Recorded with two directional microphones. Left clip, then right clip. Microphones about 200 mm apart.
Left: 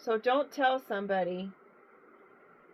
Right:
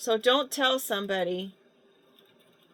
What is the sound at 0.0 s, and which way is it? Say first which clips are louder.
Speech: right 4 dB; 60° right (ahead or behind).